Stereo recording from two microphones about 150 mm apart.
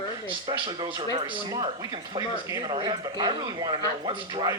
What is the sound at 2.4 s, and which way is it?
Speech, 30° right (ahead or behind).